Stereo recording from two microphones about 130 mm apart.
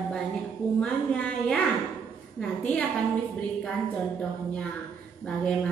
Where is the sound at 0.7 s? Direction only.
10° left (ahead or behind).